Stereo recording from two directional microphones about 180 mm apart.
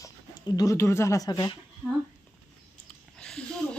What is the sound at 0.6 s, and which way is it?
Speech, 15° left (ahead or behind).